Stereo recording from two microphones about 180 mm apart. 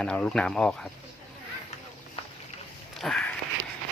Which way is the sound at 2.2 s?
35° left (ahead or behind).